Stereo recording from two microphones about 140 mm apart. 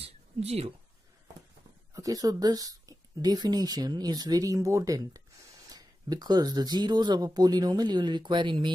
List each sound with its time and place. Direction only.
0.0 s speech: 45° right (ahead or behind)
2.0 s speech: 25° right (ahead or behind)